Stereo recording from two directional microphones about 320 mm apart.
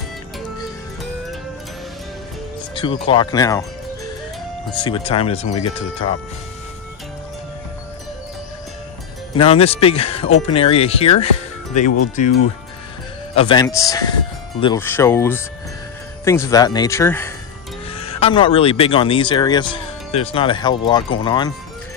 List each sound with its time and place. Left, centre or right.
2.7 s speech: centre
4.7 s speech: centre
9.3 s speech: centre
13.3 s speech: centre